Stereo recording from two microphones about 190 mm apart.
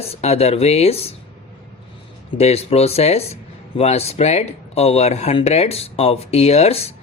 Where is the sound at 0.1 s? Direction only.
35° left (ahead or behind).